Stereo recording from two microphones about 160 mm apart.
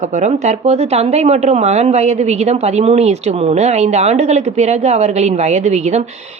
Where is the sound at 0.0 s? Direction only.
45° right (ahead or behind).